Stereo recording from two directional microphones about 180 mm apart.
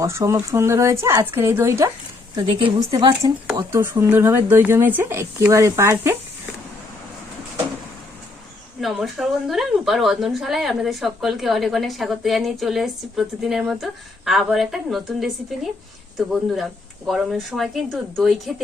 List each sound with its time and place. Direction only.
0.0 s speech: 15° right (ahead or behind)
2.5 s a woman's voice: 30° right (ahead or behind)
3.7 s speech: 10° right (ahead or behind)
8.8 s a woman's voice: centre (ahead or behind)
16.3 s a woman's voice: centre (ahead or behind)